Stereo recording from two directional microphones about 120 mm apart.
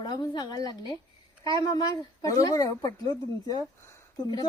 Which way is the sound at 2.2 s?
30° left (ahead or behind).